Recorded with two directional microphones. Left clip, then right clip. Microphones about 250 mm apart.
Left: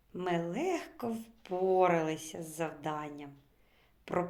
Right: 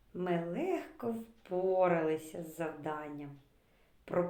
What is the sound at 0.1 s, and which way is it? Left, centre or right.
Speech, left.